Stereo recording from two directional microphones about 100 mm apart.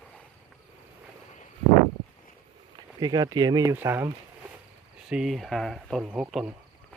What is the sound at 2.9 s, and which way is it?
Speech, 40° right (ahead or behind).